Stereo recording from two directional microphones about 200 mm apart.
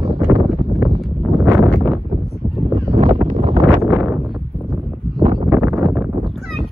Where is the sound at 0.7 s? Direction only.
5° right (ahead or behind).